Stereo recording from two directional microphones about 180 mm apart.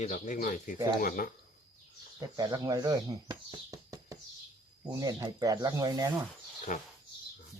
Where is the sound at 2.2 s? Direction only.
20° right (ahead or behind).